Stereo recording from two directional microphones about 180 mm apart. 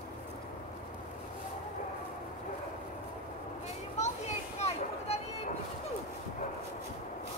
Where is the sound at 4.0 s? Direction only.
40° left (ahead or behind).